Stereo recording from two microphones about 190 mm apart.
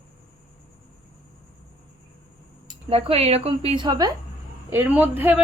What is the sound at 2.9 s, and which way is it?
A woman's voice, 30° right (ahead or behind).